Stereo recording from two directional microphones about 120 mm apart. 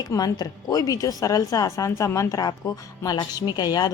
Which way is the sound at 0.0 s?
30° left (ahead or behind).